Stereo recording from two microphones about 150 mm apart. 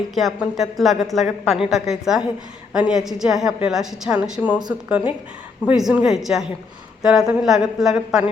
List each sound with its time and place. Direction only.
0.1 s a woman's voice: centre (ahead or behind)